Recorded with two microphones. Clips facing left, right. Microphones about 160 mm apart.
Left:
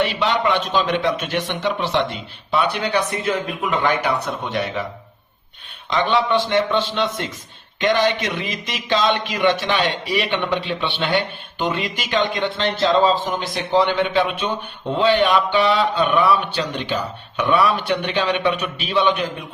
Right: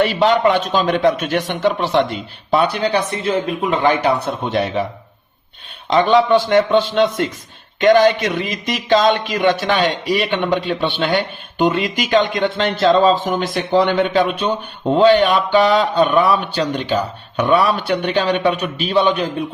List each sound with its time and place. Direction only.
0.0 s speech: 45° right (ahead or behind); by 4.9 s 30° right (ahead or behind)
5.9 s speech: 40° right (ahead or behind)